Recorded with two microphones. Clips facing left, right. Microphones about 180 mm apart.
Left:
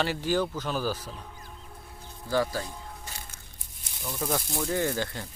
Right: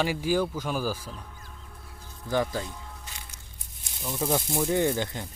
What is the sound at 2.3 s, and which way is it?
Speech, 20° right (ahead or behind).